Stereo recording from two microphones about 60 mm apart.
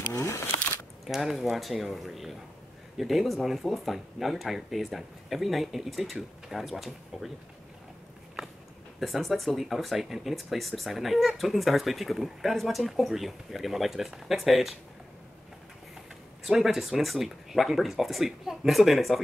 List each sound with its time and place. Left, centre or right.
0.1 s a sound: left
1.0 s speech: centre
9.0 s speech: centre
16.4 s speech: centre